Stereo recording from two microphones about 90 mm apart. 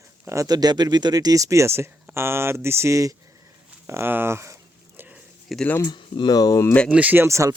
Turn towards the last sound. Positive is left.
turn(degrees=-35)  # may be behind; listen again after turning